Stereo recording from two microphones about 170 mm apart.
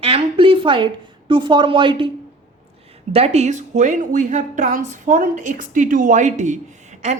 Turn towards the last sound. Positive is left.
turn(degrees=-45)  # may be behind; listen again after turning